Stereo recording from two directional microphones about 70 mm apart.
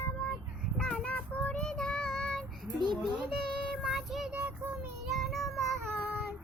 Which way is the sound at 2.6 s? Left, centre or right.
Right.